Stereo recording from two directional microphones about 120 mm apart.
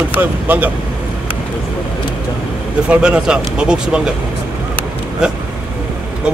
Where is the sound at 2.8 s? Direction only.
10° right (ahead or behind).